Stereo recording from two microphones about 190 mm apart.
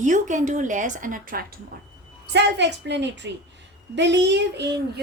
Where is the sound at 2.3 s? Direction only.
65° right (ahead or behind).